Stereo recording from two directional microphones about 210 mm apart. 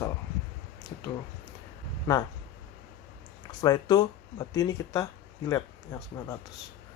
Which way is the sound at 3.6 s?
20° left (ahead or behind).